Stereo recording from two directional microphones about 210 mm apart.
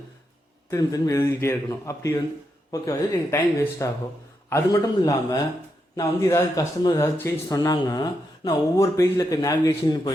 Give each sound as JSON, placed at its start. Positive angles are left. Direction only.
{"t": 0.7, "sound": "speech", "side_deg": 15}